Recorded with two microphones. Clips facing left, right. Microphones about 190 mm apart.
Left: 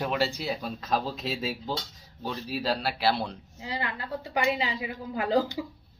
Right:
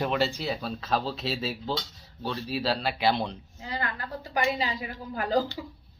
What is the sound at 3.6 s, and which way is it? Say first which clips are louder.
A woman's voice: even; 25° left (ahead or behind).